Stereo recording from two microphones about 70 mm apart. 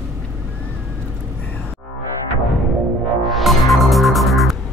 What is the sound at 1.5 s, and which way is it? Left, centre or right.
Music, left.